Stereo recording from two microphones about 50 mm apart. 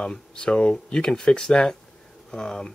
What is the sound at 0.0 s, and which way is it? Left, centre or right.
Speech, centre.